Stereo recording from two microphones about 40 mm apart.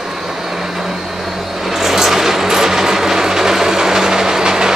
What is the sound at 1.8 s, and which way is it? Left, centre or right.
Vehicle, centre.